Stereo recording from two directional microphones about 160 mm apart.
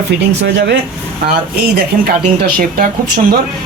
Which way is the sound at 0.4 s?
90° right.